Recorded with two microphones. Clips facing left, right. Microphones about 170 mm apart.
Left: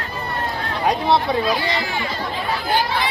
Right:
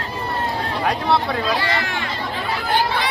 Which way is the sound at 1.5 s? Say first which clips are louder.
Even; 70° right (ahead or behind).